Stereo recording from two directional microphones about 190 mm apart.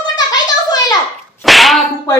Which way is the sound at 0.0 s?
20° left (ahead or behind).